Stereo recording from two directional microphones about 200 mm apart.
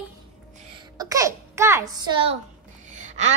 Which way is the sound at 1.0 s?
15° right (ahead or behind).